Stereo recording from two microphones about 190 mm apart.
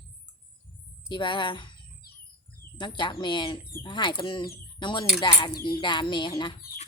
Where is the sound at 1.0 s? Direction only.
25° left (ahead or behind).